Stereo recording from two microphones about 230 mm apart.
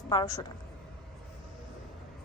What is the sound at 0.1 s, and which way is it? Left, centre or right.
Speech, centre.